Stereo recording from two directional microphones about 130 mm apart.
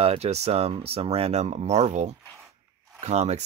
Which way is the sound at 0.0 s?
50° right (ahead or behind).